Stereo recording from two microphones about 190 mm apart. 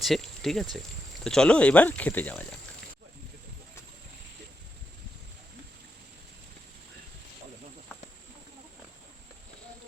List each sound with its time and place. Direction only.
0.0 s speech: centre (ahead or behind)